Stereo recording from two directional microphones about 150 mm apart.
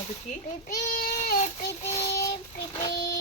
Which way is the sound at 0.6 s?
75° left (ahead or behind).